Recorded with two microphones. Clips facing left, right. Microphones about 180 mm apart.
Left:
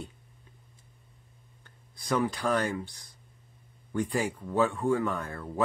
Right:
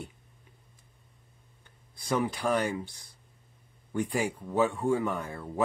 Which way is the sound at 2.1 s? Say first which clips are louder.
Even; 15° right (ahead or behind).